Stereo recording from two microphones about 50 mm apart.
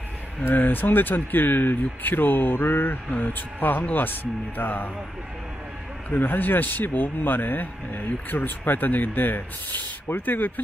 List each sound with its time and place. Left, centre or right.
0.5 s speech: left
6.0 s speech: left